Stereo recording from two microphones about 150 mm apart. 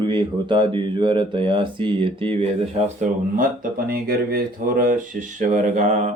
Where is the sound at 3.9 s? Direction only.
80° right.